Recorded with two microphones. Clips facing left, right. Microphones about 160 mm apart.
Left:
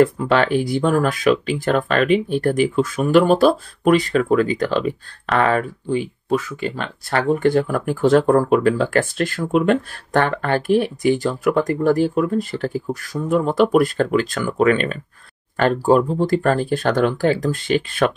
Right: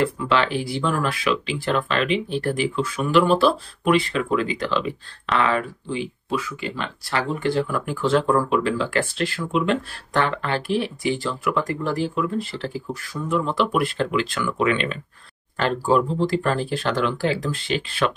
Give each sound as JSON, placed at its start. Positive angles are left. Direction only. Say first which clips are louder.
{"t": 0.0, "sound": "speech", "louder": "left 5 dB", "side_deg": 50}